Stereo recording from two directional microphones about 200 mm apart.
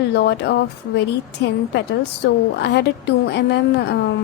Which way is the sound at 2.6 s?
60° left (ahead or behind).